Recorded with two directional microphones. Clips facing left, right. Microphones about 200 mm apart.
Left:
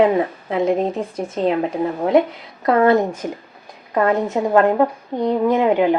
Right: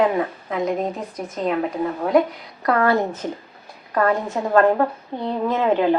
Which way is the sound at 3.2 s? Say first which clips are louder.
Left 1 dB; 10° left (ahead or behind).